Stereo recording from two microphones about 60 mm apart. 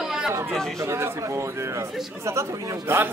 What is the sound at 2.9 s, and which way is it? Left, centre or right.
Speech, right.